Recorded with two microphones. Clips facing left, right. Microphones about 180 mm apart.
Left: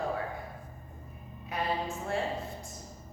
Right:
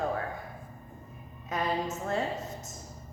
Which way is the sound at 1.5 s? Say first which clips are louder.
Right 2 dB; 40° right (ahead or behind).